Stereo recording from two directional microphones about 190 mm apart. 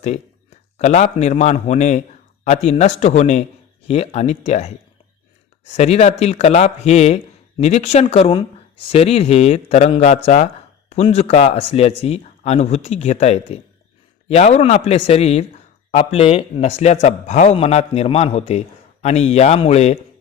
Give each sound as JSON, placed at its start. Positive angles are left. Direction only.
{"t": 0.8, "sound": "a man's voice", "side_deg": 35}